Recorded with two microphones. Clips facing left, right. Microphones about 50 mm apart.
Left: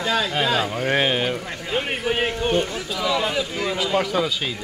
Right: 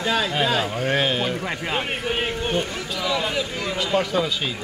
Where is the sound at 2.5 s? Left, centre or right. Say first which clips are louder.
Left 2 dB; centre.